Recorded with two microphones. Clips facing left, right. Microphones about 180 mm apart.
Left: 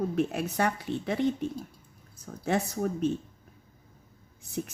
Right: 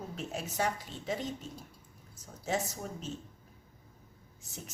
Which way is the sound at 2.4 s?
60° left (ahead or behind).